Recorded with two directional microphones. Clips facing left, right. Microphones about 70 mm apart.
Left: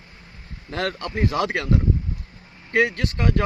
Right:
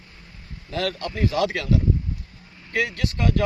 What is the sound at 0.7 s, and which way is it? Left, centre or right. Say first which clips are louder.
Speech: even; left.